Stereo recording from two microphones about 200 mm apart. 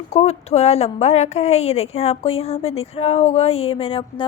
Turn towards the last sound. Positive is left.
turn(degrees=25)  # may be behind; listen again after turning